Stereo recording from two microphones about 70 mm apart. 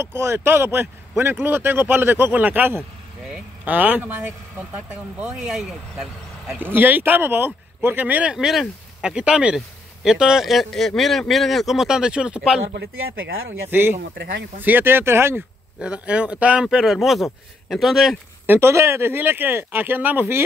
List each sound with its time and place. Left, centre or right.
0.0 s speech: right
5.3 s speech: centre
6.5 s speech: right; by 12.6 s centre
13.7 s speech: right
15.8 s speech: centre
16.7 s speech: centre
18.5 s speech: right